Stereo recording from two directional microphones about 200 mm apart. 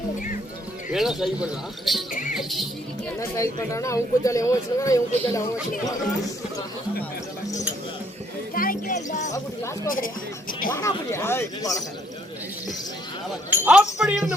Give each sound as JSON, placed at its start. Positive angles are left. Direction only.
{"t": 0.9, "sound": "a man's voice", "side_deg": 0}
{"t": 3.2, "sound": "speech", "side_deg": 15}
{"t": 8.5, "sound": "music", "side_deg": 45}
{"t": 9.8, "sound": "speech", "side_deg": 45}
{"t": 10.8, "sound": "speech", "side_deg": 15}
{"t": 13.6, "sound": "a man's voice", "side_deg": -5}